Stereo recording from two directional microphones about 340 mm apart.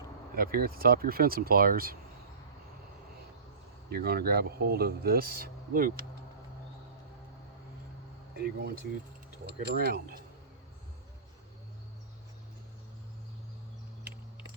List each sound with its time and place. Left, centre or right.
0.3 s speech: right
3.9 s speech: right
8.4 s speech: right